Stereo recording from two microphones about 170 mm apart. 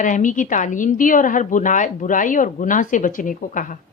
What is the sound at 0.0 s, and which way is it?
Speech, 50° left (ahead or behind).